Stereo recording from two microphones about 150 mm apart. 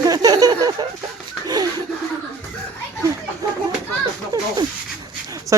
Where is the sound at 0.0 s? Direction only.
25° right (ahead or behind).